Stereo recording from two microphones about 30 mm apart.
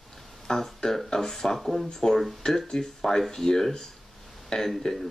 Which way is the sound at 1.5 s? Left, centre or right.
Centre.